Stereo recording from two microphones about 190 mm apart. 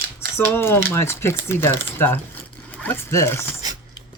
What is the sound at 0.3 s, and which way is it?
Speech, 10° left (ahead or behind).